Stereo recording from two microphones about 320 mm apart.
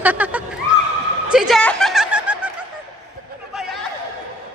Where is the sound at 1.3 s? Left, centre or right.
Centre.